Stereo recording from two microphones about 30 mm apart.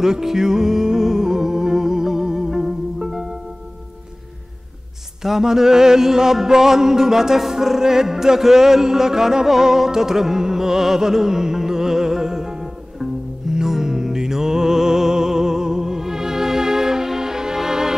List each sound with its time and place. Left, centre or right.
0.0 s music: centre
5.2 s mantra: centre